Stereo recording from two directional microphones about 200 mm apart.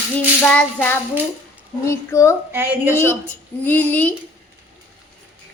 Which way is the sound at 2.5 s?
10° right (ahead or behind).